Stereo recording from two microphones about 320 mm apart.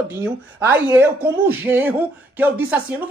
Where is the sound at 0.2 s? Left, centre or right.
Centre.